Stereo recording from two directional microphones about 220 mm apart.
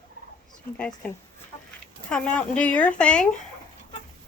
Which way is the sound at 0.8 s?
5° left (ahead or behind).